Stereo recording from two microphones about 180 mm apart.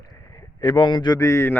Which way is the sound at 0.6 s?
25° left (ahead or behind).